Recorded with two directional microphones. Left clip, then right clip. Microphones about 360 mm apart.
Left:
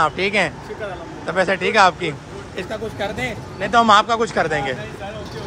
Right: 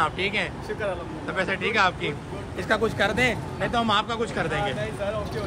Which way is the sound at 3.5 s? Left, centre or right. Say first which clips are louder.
Left 13 dB; left.